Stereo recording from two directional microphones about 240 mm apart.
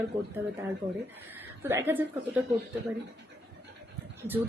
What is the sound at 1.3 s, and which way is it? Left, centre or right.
A woman's voice, centre.